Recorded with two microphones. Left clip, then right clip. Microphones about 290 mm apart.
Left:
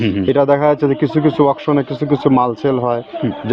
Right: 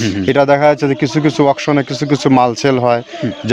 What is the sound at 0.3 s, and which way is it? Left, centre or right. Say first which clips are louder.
Speech: right 3 dB; right.